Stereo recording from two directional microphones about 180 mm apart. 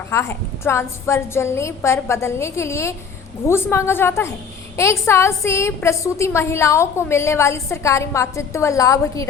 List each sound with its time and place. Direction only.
0.1 s a woman's voice: 15° left (ahead or behind)